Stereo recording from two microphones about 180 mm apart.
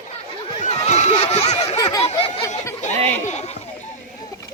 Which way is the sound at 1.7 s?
20° left (ahead or behind).